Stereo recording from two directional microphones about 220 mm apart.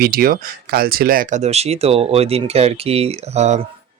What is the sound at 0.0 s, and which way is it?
Speech, 40° right (ahead or behind).